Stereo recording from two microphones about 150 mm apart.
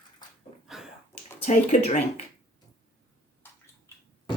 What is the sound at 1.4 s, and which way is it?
Speech, 55° left (ahead or behind).